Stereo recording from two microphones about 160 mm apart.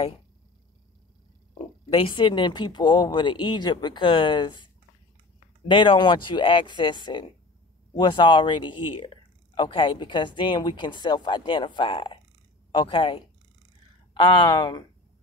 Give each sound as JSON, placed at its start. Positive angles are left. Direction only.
{"t": 1.9, "sound": "speech", "side_deg": 35}
{"t": 5.7, "sound": "speech", "side_deg": 30}